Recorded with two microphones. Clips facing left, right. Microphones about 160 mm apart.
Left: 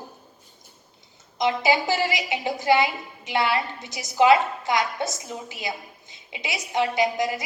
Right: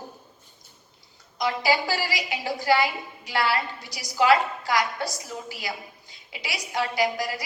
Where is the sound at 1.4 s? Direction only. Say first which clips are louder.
Left 2 dB; 20° left (ahead or behind).